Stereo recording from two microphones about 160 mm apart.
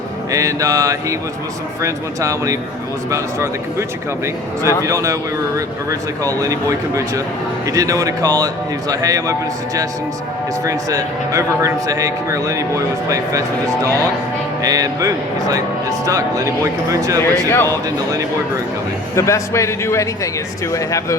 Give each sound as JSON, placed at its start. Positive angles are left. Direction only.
{"t": 0.3, "sound": "a man's voice", "side_deg": -20}
{"t": 10.6, "sound": "a man's voice", "side_deg": -20}
{"t": 14.6, "sound": "a man's voice", "side_deg": -20}
{"t": 17.3, "sound": "speech", "side_deg": 15}
{"t": 17.7, "sound": "a man's voice", "side_deg": -20}
{"t": 19.1, "sound": "a man's voice", "side_deg": 20}